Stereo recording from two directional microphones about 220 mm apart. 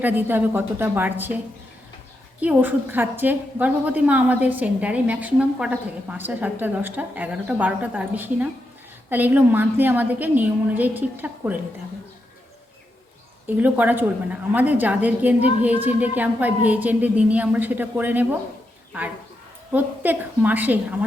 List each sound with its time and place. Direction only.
0.0 s a woman's voice: 10° right (ahead or behind)
2.4 s a woman's voice: 5° right (ahead or behind)
13.6 s a woman's voice: 5° right (ahead or behind)
19.7 s a woman's voice: 10° right (ahead or behind)